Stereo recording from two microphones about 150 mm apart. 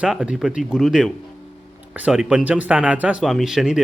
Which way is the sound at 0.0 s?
5° right (ahead or behind).